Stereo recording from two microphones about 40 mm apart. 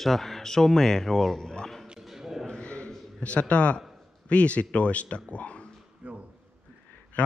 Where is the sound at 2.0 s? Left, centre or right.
Centre.